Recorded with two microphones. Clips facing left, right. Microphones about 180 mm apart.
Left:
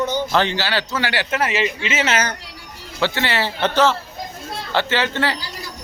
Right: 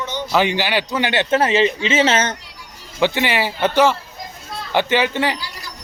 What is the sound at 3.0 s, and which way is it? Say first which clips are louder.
A man's voice: right 3 dB; 15° right (ahead or behind).